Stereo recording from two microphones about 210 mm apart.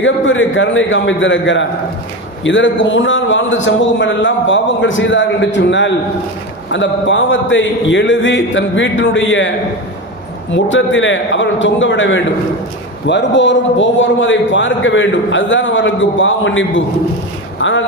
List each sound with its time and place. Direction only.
0.0 s a man's voice: 65° left (ahead or behind)
10.5 s a man's voice: 65° left (ahead or behind)
17.6 s a sound: 65° left (ahead or behind)